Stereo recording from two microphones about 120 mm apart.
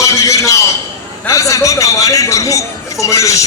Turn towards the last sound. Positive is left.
turn(degrees=25)  # may be behind; listen again after turning